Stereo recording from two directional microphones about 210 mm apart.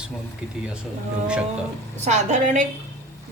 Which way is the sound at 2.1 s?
35° right (ahead or behind).